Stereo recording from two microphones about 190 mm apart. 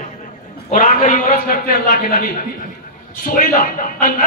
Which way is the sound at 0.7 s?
45° left (ahead or behind).